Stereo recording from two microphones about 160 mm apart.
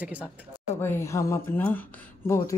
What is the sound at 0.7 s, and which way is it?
Speech, 15° left (ahead or behind).